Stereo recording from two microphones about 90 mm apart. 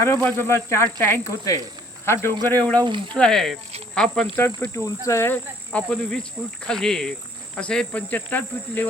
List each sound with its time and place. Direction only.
0.0 s speech: 30° left (ahead or behind)
2.7 s speech: 60° right (ahead or behind)
3.2 s speech: 5° left (ahead or behind)
4.4 s speech: 30° left (ahead or behind)
5.7 s cricket: 10° left (ahead or behind)